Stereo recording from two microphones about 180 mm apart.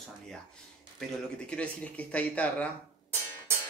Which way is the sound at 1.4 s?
5° left (ahead or behind).